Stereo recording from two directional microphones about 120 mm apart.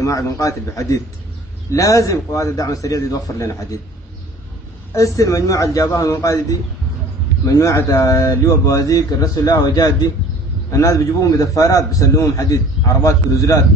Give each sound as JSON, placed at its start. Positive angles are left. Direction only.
{"t": 0.0, "sound": "a man's voice", "side_deg": 25}
{"t": 4.9, "sound": "a man's voice", "side_deg": 25}